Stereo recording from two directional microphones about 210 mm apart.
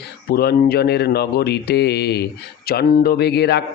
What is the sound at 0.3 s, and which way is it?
Speech, 45° left (ahead or behind).